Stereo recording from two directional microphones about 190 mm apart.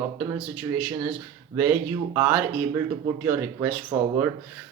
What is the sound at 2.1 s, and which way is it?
Speech, 15° right (ahead or behind).